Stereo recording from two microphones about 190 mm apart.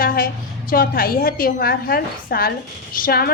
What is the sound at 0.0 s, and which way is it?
A woman's voice, 50° left (ahead or behind).